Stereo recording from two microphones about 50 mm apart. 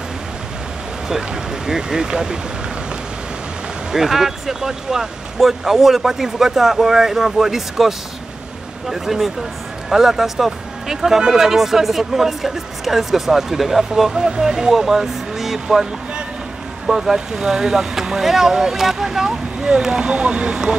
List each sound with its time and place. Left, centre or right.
1.0 s speech: centre
3.9 s speech: centre